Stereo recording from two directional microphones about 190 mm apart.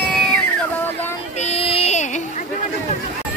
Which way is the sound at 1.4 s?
30° left (ahead or behind).